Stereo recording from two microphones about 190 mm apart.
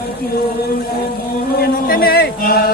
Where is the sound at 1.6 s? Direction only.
50° left (ahead or behind).